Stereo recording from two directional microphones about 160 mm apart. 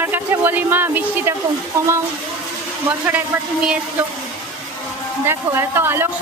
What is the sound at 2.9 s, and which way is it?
Speech, 10° right (ahead or behind).